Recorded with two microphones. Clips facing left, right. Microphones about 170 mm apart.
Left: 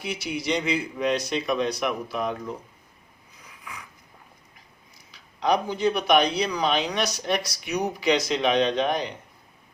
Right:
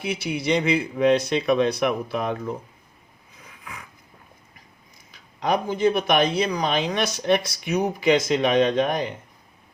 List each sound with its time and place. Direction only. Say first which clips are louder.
0.0 s speech: right 3 dB; 60° right (ahead or behind)
3.4 s a sound: right 1 dB; 55° right (ahead or behind)
5.1 s speech: even; 50° right (ahead or behind)